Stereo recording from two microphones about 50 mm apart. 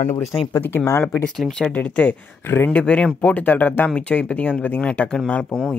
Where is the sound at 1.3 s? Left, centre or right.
Centre.